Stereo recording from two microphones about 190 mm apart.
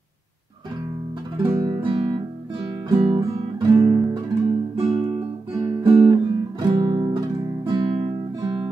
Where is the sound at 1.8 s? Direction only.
25° right (ahead or behind).